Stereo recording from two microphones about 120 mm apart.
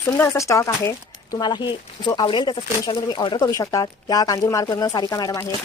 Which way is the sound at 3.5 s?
25° left (ahead or behind).